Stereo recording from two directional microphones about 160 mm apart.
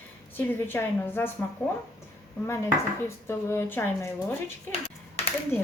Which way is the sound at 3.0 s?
15° left (ahead or behind).